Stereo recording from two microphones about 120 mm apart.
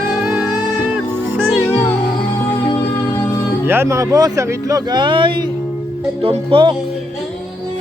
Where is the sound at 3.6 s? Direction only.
20° right (ahead or behind); by 6.7 s 45° right (ahead or behind).